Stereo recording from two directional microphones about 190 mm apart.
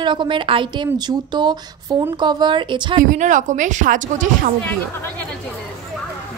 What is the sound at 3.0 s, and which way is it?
Speech, 40° right (ahead or behind).